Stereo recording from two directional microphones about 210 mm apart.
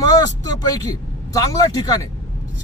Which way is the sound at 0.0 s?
15° left (ahead or behind).